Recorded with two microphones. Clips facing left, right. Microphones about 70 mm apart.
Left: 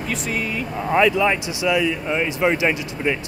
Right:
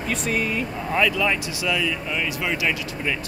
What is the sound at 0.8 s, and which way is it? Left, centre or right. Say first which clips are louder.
Speech: left 5 dB; left.